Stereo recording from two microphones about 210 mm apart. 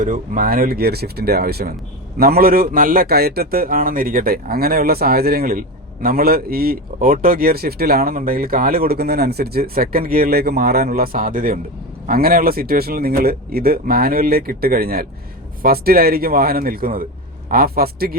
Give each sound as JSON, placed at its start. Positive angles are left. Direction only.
{"t": 0.0, "sound": "a man's voice", "side_deg": -40}